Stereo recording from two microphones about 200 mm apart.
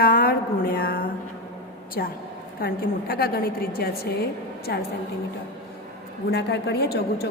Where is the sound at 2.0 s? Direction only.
50° left (ahead or behind).